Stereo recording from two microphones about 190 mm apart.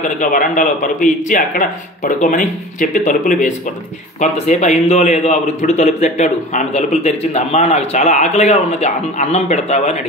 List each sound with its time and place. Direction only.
0.0 s a man's voice: 45° left (ahead or behind)